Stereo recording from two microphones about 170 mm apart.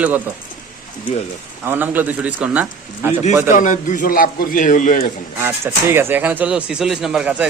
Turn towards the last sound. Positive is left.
turn(degrees=-5)  # may be behind; listen again after turning